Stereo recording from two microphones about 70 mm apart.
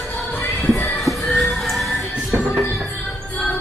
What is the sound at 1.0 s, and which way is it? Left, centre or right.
Music, centre.